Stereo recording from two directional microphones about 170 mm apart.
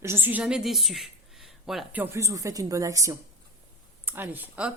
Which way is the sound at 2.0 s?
15° right (ahead or behind).